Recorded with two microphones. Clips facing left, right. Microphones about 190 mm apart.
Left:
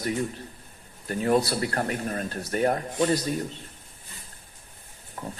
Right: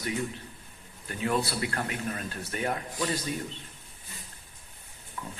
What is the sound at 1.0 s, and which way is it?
Speech, 40° left (ahead or behind).